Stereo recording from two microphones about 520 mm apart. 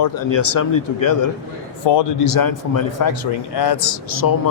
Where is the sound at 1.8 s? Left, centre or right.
Left.